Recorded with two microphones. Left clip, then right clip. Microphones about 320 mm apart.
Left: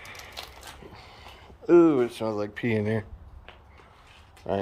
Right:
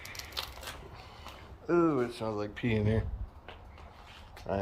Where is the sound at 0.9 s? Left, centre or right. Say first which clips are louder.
Left 3 dB; left.